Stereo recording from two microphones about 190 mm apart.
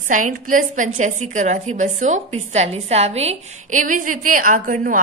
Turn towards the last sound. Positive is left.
turn(degrees=-45)  # may be behind; listen again after turning